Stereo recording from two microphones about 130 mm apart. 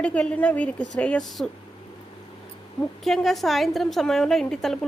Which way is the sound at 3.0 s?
Centre (ahead or behind).